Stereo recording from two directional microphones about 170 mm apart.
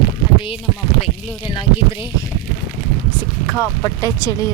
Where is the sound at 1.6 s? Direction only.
30° left (ahead or behind).